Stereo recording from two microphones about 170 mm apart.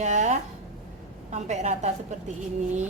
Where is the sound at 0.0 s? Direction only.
45° right (ahead or behind).